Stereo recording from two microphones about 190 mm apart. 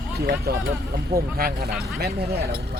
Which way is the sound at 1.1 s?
50° right (ahead or behind).